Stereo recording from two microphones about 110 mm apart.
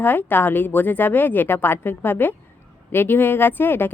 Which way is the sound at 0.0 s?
20° left (ahead or behind).